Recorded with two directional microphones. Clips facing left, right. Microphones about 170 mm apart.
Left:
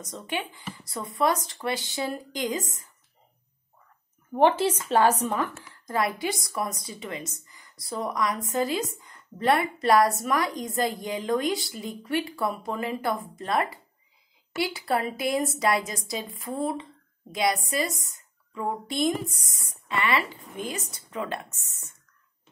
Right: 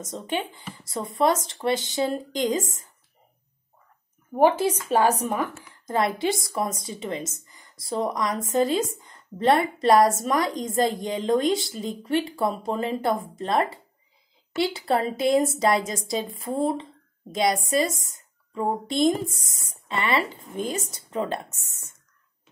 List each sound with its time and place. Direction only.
0.0 s a woman's voice: 25° right (ahead or behind)
4.3 s a woman's voice: 10° right (ahead or behind); by 16.8 s 25° right (ahead or behind)
18.5 s a woman's voice: 30° right (ahead or behind)